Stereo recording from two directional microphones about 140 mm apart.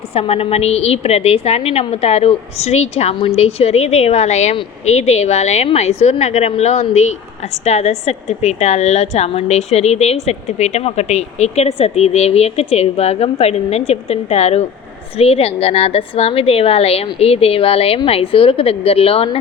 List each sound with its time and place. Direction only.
0.1 s a woman's voice: 45° left (ahead or behind)